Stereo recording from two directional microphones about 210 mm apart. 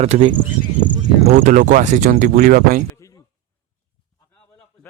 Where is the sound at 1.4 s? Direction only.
40° right (ahead or behind).